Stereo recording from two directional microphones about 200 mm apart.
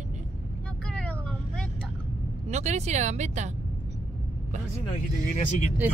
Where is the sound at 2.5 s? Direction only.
35° right (ahead or behind).